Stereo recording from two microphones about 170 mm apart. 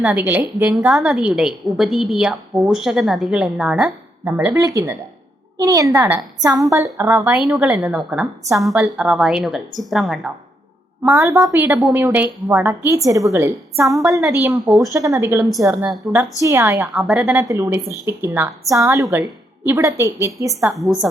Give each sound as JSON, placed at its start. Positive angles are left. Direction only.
{"t": 0.0, "sound": "a woman's voice", "side_deg": -10}
{"t": 11.0, "sound": "a woman's voice", "side_deg": -15}
{"t": 14.4, "sound": "a woman's voice", "side_deg": -10}
{"t": 14.9, "sound": "a woman's voice", "side_deg": -20}
{"t": 20.7, "sound": "a woman's voice", "side_deg": 0}